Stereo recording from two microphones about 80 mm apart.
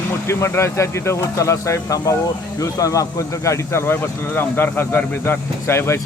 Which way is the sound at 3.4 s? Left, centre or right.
Left.